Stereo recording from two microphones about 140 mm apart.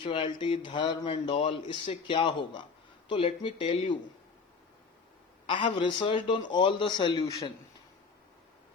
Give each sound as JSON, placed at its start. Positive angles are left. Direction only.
{"t": 0.0, "sound": "speech", "side_deg": 40}
{"t": 5.5, "sound": "speech", "side_deg": 35}